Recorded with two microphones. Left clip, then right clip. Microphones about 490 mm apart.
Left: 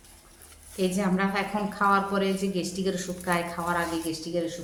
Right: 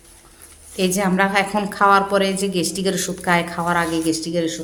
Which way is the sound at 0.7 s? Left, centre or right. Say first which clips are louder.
Right 8 dB; centre.